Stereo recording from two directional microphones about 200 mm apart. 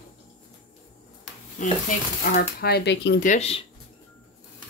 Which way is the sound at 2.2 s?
50° left (ahead or behind).